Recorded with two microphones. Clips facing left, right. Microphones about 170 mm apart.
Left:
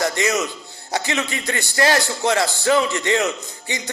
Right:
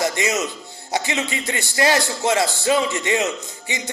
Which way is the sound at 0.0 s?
20° right (ahead or behind).